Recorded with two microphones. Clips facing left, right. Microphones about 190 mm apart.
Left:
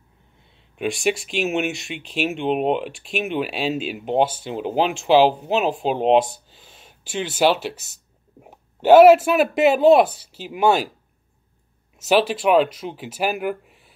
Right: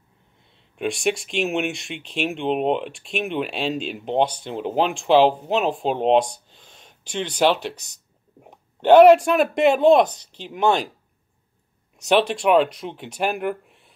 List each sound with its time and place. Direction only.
0.7 s speech: centre (ahead or behind)
12.0 s speech: centre (ahead or behind)